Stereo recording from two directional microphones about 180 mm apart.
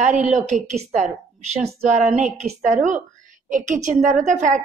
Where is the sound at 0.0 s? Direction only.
40° right (ahead or behind).